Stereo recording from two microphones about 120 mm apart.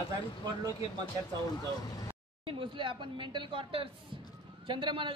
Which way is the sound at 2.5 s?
45° right (ahead or behind).